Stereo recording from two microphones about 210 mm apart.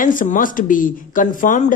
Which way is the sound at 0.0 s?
40° left (ahead or behind).